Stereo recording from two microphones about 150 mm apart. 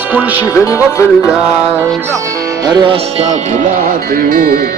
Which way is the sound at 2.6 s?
25° right (ahead or behind).